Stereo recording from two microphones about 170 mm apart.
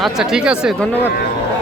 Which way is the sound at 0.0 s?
5° right (ahead or behind).